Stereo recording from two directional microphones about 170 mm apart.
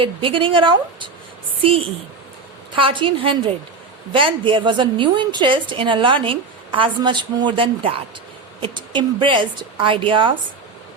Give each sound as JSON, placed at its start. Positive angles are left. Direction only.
{"t": 0.0, "sound": "a woman's voice", "side_deg": -30}
{"t": 2.7, "sound": "a woman's voice", "side_deg": -30}